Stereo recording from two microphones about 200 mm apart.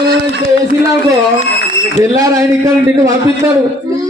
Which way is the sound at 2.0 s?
15° right (ahead or behind).